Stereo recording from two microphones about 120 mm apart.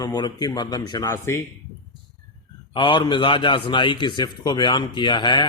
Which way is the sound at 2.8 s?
45° left (ahead or behind).